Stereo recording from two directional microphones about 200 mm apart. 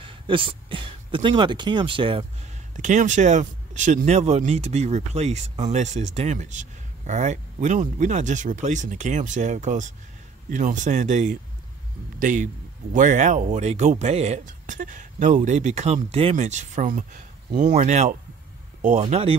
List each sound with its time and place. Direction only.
0.0 s speech: 25° right (ahead or behind)
2.7 s speech: 40° right (ahead or behind)